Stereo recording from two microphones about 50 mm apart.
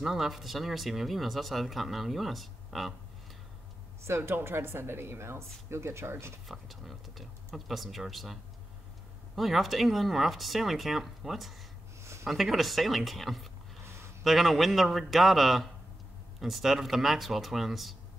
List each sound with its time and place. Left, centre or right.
0.0 s speech: centre
4.2 s speech: right
6.4 s speech: centre
12.0 s a sound: right
12.3 s speech: centre